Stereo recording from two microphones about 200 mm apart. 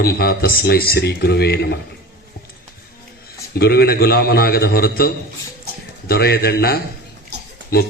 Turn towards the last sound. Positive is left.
turn(degrees=50)  # may be behind; listen again after turning